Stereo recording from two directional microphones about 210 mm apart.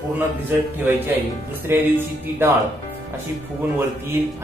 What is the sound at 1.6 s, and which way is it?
Speech, 10° right (ahead or behind).